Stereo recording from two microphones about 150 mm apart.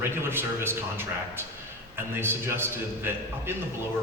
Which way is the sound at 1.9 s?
15° right (ahead or behind).